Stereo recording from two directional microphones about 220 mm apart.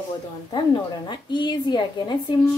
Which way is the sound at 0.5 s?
20° left (ahead or behind).